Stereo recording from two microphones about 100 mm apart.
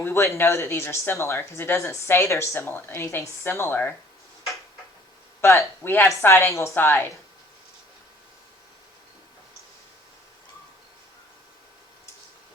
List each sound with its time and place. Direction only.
0.0 s speech: 25° left (ahead or behind)
5.4 s speech: 25° left (ahead or behind)